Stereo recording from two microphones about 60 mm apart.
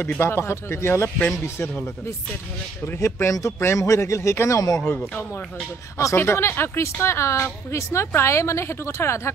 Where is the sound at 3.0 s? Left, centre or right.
Left.